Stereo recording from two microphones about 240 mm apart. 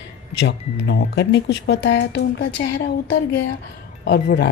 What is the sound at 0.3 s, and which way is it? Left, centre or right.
A woman's voice, left.